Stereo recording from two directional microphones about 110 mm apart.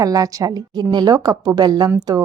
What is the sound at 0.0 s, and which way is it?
A woman's voice, 35° right (ahead or behind).